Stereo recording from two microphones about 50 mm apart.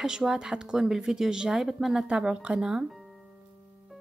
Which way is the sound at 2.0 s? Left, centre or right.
Right.